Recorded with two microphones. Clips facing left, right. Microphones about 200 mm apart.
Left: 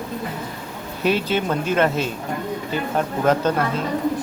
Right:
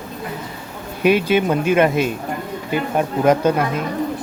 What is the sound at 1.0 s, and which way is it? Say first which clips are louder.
Speech: right 5 dB; 10° right (ahead or behind).